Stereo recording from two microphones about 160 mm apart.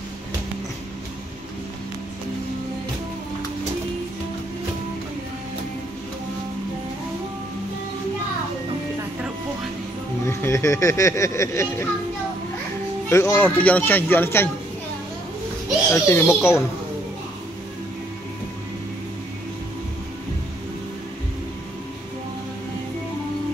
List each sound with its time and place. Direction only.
10.2 s speech: 15° left (ahead or behind)
13.1 s speech: 15° left (ahead or behind)
15.9 s speech: 15° left (ahead or behind)